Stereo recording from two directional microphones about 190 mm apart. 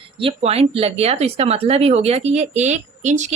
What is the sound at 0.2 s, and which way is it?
Speech, 30° right (ahead or behind).